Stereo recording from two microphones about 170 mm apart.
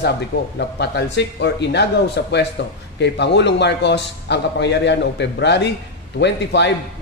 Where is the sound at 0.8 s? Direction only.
90° left.